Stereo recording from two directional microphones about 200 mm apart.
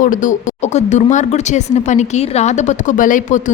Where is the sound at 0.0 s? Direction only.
40° left (ahead or behind).